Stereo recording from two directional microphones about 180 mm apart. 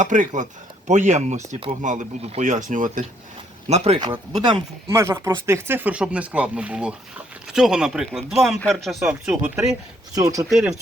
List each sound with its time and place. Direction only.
0.0 s speech: 45° right (ahead or behind)
3.7 s speech: 35° right (ahead or behind)
4.9 s speech: 15° right (ahead or behind)